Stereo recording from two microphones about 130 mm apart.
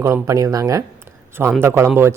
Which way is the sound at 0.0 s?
25° right (ahead or behind).